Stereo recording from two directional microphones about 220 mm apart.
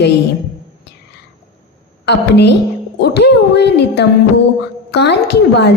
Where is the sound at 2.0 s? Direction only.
50° left (ahead or behind).